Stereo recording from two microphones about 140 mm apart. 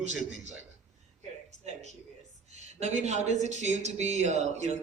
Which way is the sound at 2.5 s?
55° right (ahead or behind).